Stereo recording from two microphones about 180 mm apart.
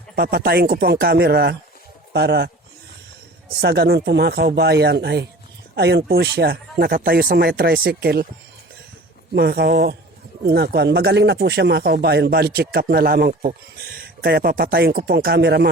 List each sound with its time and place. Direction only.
0.2 s speech: 60° right (ahead or behind)
3.6 s speech: 65° right (ahead or behind)
9.3 s speech: 65° right (ahead or behind)